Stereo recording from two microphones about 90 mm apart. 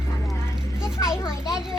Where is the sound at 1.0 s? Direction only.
40° left (ahead or behind).